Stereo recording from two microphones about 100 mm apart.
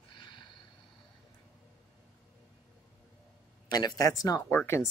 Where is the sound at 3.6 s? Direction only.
45° left (ahead or behind).